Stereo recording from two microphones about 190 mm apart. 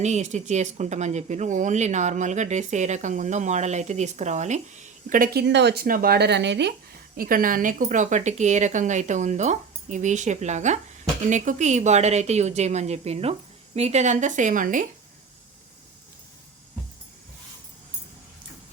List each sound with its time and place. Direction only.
0.0 s speech: 40° right (ahead or behind); by 6.7 s 65° right (ahead or behind)
7.2 s speech: 50° right (ahead or behind)